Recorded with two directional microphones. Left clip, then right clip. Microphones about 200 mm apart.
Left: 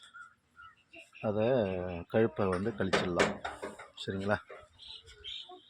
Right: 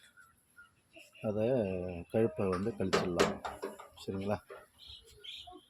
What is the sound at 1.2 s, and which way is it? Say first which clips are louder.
Speech: left 3 dB; 5° left (ahead or behind).